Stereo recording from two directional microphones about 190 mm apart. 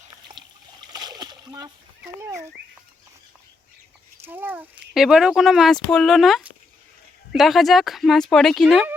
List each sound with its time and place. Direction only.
0.9 s splash: 20° right (ahead or behind)
4.2 s speech: 10° right (ahead or behind)